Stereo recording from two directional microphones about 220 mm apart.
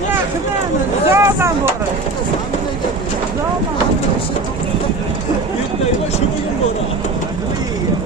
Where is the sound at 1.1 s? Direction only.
10° right (ahead or behind).